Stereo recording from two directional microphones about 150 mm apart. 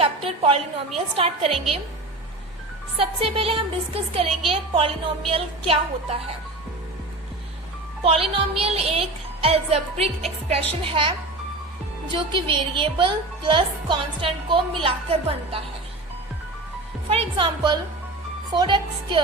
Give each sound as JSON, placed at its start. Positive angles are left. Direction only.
{"t": 0.3, "sound": "speech", "side_deg": -40}
{"t": 3.0, "sound": "speech", "side_deg": -40}
{"t": 8.0, "sound": "speech", "side_deg": -40}
{"t": 12.1, "sound": "speech", "side_deg": -35}
{"t": 17.1, "sound": "speech", "side_deg": -40}